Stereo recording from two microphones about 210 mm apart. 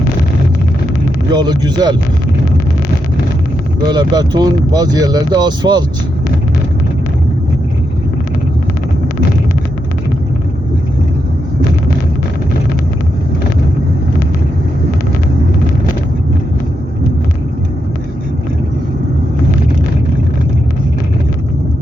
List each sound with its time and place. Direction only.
1.3 s speech: 20° right (ahead or behind)
3.8 s speech: 20° right (ahead or behind)